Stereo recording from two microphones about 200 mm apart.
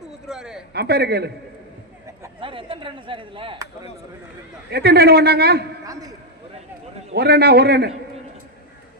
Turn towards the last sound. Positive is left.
turn(degrees=-55)  # may be behind; listen again after turning